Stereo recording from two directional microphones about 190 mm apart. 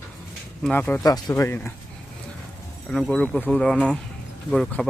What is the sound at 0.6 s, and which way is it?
Speech, 10° left (ahead or behind).